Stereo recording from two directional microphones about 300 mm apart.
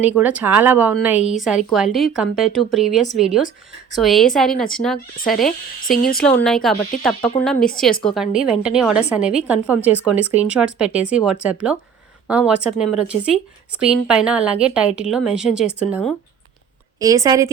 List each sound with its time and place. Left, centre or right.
0.0 s speech: centre
5.9 s speech: left
6.2 s speech: centre
17.0 s a woman's voice: centre